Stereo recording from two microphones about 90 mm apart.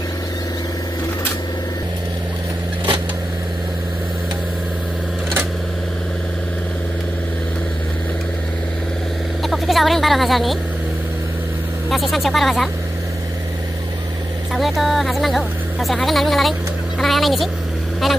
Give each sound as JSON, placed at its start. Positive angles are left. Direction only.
{"t": 9.4, "sound": "a sound", "side_deg": 0}
{"t": 11.9, "sound": "speech", "side_deg": 0}
{"t": 14.5, "sound": "speech", "side_deg": 0}